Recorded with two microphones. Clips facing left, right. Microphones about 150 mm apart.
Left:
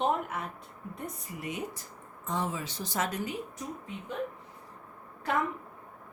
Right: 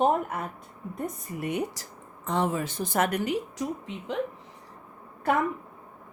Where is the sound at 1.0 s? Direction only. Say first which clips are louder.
Right 8 dB; 60° right (ahead or behind); by 4.2 s 90° right.